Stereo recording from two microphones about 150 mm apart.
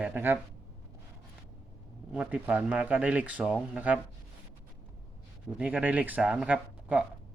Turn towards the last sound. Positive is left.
turn(degrees=-10)  # may be behind; listen again after turning